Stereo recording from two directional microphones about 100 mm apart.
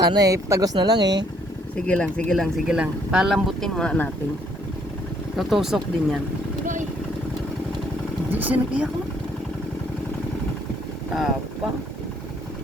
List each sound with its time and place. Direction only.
0.1 s speech: 35° right (ahead or behind)
1.7 s speech: 10° left (ahead or behind); by 3.3 s 5° right (ahead or behind)
3.3 s speech: 5° left (ahead or behind)
5.4 s speech: centre (ahead or behind)
8.3 s speech: 15° right (ahead or behind)